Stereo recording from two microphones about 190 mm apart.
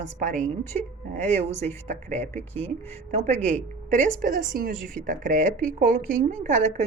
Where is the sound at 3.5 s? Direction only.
40° right (ahead or behind).